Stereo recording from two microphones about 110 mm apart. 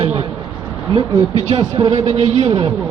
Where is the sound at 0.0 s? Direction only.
65° right (ahead or behind).